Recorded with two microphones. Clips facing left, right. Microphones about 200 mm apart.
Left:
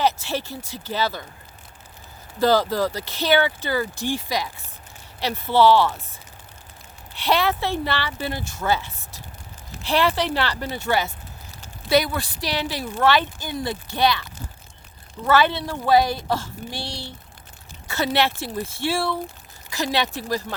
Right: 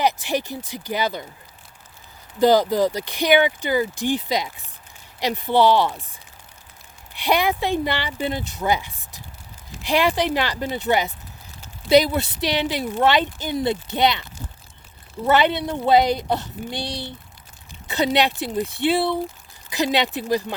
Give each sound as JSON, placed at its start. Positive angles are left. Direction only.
{"t": 0.0, "sound": "speech", "side_deg": -15}
{"t": 2.4, "sound": "speech", "side_deg": -15}
{"t": 7.1, "sound": "speech", "side_deg": -15}
{"t": 15.3, "sound": "speech", "side_deg": -20}